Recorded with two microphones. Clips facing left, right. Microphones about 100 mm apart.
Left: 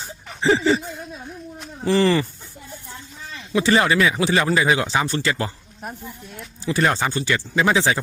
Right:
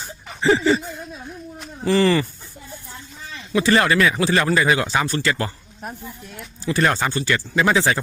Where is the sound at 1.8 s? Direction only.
25° left (ahead or behind).